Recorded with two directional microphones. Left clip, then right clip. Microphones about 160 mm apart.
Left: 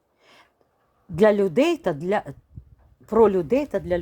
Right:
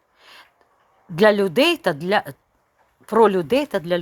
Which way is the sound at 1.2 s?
5° left (ahead or behind).